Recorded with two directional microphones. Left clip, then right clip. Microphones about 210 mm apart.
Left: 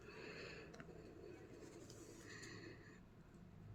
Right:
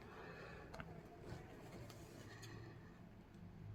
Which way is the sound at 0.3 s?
35° left (ahead or behind).